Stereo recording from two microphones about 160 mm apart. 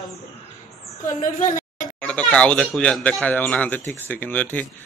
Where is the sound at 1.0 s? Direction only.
55° left (ahead or behind).